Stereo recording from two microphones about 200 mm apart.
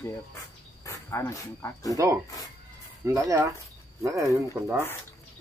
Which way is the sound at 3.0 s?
15° right (ahead or behind).